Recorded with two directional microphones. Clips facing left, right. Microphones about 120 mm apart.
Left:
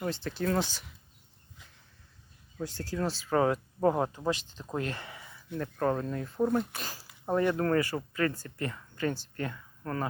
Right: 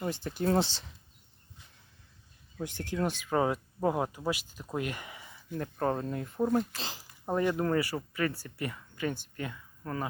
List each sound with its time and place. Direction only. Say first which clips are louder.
0.0 s speech: left 1 dB; 15° right (ahead or behind)
0.4 s speech: right 2 dB; 25° right (ahead or behind)
2.6 s speech: right 1 dB; 20° right (ahead or behind)
6.4 s speech: left 1 dB; centre (ahead or behind)
6.7 s speech: even; 20° right (ahead or behind)